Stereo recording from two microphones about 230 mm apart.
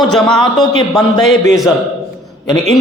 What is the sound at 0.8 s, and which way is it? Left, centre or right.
Speech, centre.